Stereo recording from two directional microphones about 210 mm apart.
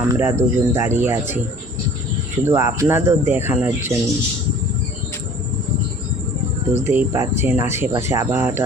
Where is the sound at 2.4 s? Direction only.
10° right (ahead or behind).